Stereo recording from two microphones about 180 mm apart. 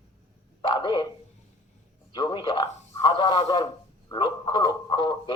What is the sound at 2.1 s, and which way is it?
Speech, 25° left (ahead or behind).